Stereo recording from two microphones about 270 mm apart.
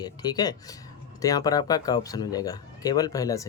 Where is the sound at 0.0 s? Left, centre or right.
Centre.